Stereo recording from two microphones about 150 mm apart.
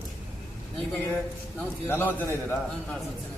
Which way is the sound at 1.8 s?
15° left (ahead or behind).